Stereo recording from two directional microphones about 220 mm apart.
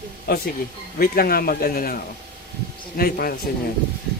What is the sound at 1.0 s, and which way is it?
Speech, 40° left (ahead or behind).